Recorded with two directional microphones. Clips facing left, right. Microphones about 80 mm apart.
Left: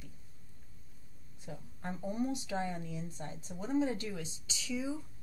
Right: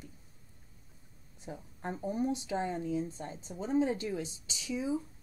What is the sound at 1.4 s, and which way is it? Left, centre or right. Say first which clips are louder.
Speech: right 3 dB; right.